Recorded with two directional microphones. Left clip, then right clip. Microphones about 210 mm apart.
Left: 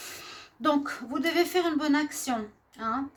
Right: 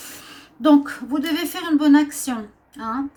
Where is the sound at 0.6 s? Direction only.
40° left (ahead or behind).